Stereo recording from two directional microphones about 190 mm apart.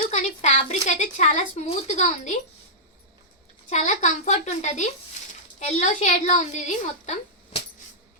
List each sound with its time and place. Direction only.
0.1 s speech: 35° left (ahead or behind)
3.7 s a woman's voice: 40° left (ahead or behind)